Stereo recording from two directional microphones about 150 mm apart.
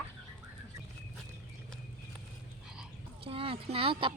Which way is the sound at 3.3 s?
40° right (ahead or behind).